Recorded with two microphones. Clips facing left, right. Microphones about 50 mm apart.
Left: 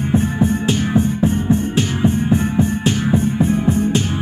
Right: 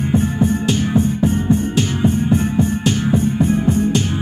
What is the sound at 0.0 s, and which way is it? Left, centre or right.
Music, centre.